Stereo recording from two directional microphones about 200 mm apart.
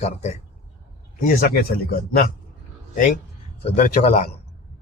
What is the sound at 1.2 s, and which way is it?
Speech, 45° left (ahead or behind).